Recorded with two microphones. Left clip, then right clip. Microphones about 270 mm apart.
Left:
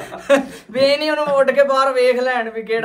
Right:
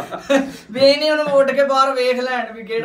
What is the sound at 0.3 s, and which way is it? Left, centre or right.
Speech, left.